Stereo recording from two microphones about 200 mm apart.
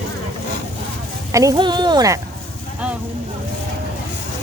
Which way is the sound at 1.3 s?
15° right (ahead or behind).